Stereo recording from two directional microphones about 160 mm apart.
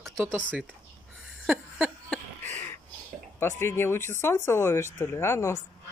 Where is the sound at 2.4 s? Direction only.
45° right (ahead or behind).